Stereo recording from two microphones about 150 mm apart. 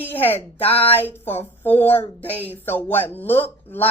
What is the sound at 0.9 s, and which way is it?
Speech, 15° left (ahead or behind).